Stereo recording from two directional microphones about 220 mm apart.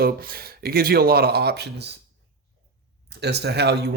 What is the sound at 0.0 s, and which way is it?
Speech, 40° right (ahead or behind).